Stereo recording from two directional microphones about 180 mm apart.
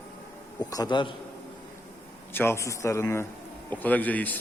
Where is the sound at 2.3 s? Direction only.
10° left (ahead or behind).